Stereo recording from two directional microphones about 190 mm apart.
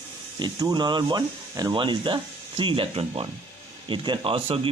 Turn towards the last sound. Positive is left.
turn(degrees=-30)  # may be behind; listen again after turning